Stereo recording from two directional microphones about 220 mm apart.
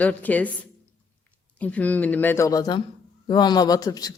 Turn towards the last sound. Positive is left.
turn(degrees=15)  # may be behind; listen again after turning